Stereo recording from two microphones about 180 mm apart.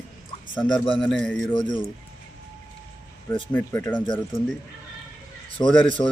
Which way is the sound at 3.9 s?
25° left (ahead or behind).